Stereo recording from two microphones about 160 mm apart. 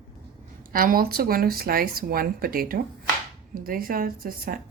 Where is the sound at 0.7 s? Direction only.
60° right (ahead or behind).